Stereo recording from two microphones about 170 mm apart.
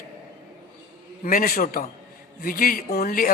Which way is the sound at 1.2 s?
55° left (ahead or behind).